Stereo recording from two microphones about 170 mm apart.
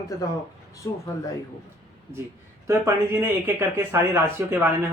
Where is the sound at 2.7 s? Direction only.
15° right (ahead or behind).